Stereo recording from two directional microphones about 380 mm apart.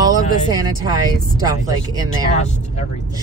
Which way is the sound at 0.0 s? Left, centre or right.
Centre.